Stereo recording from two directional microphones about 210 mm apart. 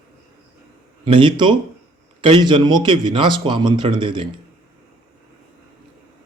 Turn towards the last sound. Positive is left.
turn(degrees=-20)  # may be behind; listen again after turning